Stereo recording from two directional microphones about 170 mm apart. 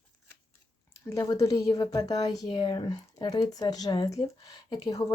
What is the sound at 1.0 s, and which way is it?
A woman's voice, 15° left (ahead or behind).